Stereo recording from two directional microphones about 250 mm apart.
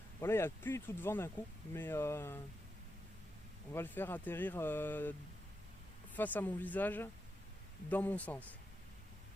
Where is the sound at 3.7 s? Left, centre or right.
Centre.